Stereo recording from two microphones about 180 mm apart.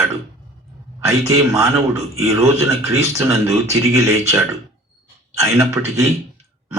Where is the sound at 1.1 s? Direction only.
15° right (ahead or behind).